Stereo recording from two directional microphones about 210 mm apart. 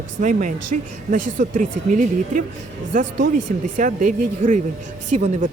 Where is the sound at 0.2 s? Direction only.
35° right (ahead or behind).